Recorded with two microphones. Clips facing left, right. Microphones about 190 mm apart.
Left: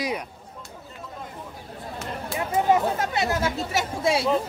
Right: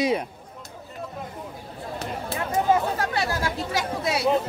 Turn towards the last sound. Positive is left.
turn(degrees=25)  # may be behind; listen again after turning